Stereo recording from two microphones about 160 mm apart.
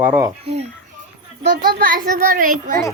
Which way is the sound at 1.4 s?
85° right.